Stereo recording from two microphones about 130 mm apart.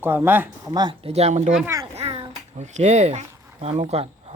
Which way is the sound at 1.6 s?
25° right (ahead or behind).